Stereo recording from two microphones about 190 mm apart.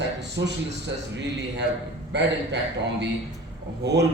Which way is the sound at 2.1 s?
65° right (ahead or behind).